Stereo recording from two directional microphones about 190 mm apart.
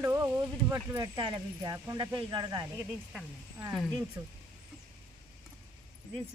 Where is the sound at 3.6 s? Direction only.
5° right (ahead or behind).